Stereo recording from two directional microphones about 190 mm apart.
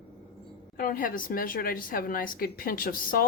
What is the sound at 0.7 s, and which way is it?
A woman's voice, 45° left (ahead or behind).